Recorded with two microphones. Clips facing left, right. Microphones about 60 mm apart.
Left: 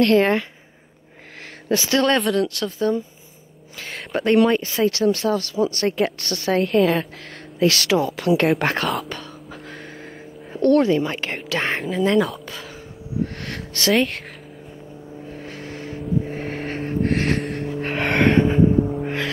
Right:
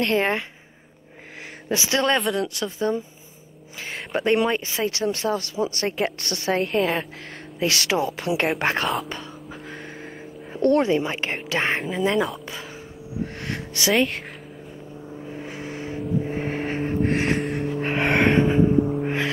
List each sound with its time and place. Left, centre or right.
0.0 s a woman's voice: centre
1.7 s a woman's voice: centre
2.0 s a woman's voice: centre; by 5.9 s right
5.9 s a woman's voice: centre
7.6 s speech: right
8.5 s speech: centre
10.6 s a woman's voice: right; by 12.4 s centre
13.2 s a sound: centre
15.2 s vehicle: centre